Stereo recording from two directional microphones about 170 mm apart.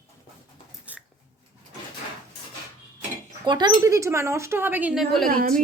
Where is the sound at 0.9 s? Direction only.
10° right (ahead or behind).